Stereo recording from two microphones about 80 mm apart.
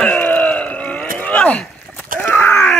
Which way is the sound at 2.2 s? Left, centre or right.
Left.